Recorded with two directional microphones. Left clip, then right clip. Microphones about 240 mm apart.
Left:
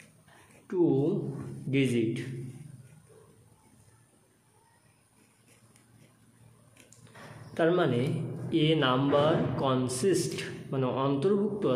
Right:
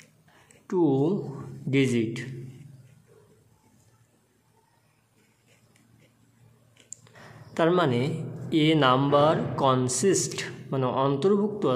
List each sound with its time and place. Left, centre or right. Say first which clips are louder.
0.7 s speech: right 3 dB; right
7.5 s speech: right 3 dB; right